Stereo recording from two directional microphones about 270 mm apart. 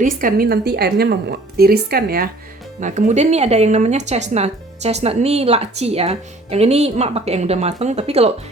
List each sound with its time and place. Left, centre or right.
0.0 s a woman's voice: right